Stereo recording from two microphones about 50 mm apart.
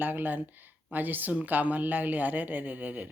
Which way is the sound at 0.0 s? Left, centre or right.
Right.